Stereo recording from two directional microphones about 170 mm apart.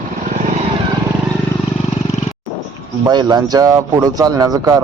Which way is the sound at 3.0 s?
25° right (ahead or behind).